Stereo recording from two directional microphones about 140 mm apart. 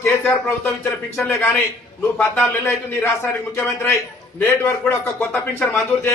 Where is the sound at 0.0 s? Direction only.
15° left (ahead or behind).